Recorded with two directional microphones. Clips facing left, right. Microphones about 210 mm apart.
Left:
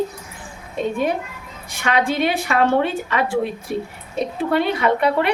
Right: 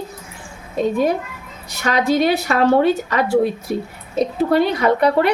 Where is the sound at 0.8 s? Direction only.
35° right (ahead or behind).